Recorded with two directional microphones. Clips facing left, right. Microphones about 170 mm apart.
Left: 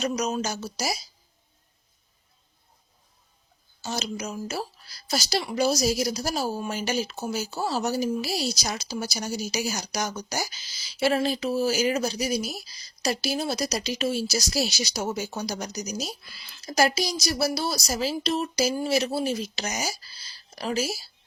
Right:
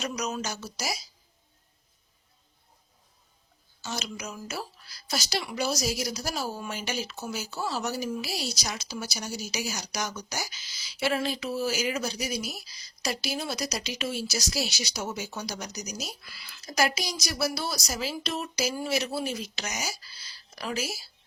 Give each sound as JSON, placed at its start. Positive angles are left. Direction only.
{"t": 0.0, "sound": "a woman's voice", "side_deg": 30}
{"t": 3.8, "sound": "a woman's voice", "side_deg": 35}